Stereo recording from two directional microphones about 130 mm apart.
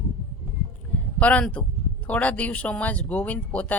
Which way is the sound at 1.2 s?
10° left (ahead or behind).